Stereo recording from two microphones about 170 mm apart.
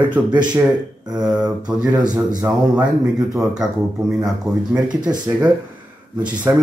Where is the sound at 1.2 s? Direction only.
5° right (ahead or behind).